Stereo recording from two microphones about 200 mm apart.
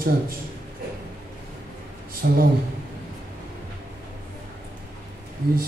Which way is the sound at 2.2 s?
55° right (ahead or behind).